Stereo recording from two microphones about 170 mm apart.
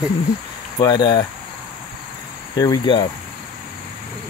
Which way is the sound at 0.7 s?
25° left (ahead or behind).